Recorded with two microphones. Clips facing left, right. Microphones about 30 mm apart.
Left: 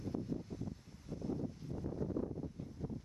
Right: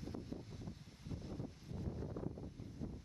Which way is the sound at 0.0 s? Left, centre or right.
Centre.